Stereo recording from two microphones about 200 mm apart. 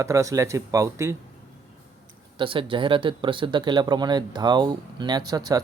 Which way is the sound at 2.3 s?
25° right (ahead or behind).